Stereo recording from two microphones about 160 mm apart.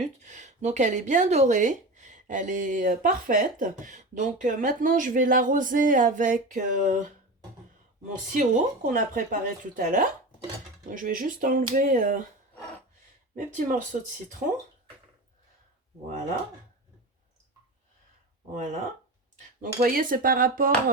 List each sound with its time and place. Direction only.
0.0 s speech: 50° right (ahead or behind)
8.3 s speech: 55° right (ahead or behind)
13.3 s speech: 55° right (ahead or behind)
18.5 s speech: 45° right (ahead or behind)
19.8 s speech: 60° right (ahead or behind)